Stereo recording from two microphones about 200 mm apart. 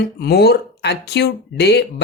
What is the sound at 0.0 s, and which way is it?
Speech, 55° left (ahead or behind).